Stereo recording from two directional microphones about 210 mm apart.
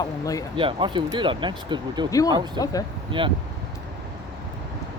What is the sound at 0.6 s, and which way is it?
Speech, 25° right (ahead or behind).